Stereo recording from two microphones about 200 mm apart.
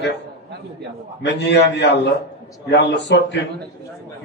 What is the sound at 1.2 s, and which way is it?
A man's voice, 60° left (ahead or behind).